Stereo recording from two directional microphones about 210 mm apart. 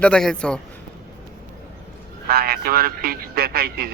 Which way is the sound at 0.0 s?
5° left (ahead or behind).